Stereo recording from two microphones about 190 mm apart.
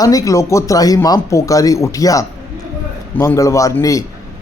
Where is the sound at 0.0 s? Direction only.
15° left (ahead or behind).